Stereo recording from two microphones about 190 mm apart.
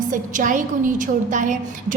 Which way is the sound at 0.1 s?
45° right (ahead or behind).